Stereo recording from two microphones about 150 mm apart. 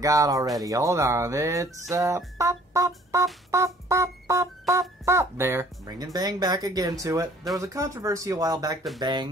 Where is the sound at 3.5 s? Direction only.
20° right (ahead or behind).